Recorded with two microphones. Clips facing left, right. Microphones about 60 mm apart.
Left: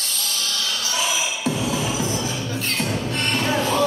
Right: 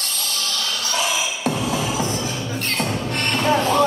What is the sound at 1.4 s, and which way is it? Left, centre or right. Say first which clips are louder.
Music: right 1 dB; right.